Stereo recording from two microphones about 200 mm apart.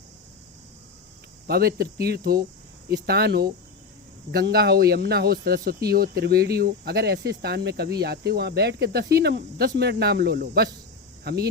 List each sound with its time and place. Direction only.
1.5 s speech: 50° right (ahead or behind)